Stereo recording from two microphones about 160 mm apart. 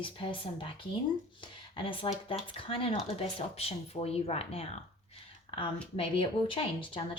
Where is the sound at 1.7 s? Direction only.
35° left (ahead or behind).